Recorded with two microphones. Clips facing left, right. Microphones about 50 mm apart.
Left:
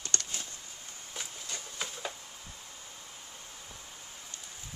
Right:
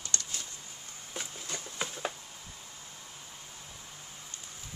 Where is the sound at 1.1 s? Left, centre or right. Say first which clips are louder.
Right 2 dB; centre.